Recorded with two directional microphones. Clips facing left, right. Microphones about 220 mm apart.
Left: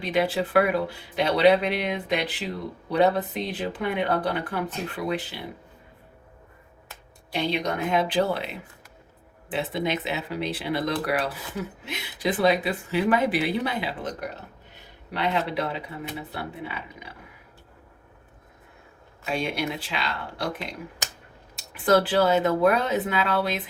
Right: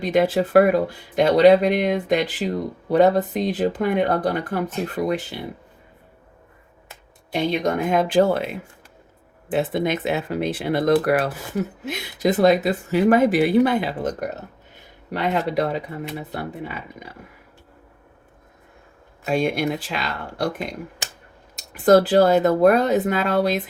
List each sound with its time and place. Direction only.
0.0 s speech: 45° right (ahead or behind)
7.3 s speech: 50° right (ahead or behind)
9.5 s speech: 50° right (ahead or behind)
19.2 s speech: 45° right (ahead or behind)